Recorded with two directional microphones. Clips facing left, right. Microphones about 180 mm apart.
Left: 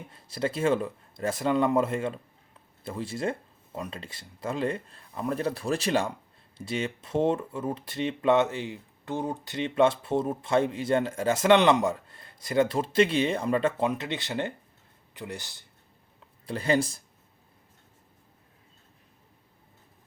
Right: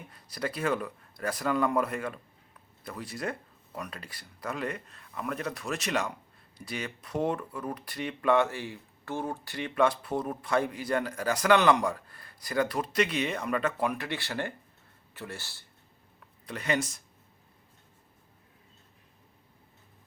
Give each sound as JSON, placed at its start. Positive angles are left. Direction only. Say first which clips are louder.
{"t": 0.1, "sound": "speech", "louder": "left 5 dB", "side_deg": 25}
{"t": 16.2, "sound": "speech", "louder": "left 5 dB", "side_deg": 30}